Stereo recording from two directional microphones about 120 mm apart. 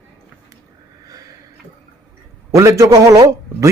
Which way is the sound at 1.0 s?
30° right (ahead or behind).